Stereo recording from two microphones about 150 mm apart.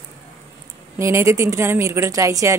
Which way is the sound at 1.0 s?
20° right (ahead or behind).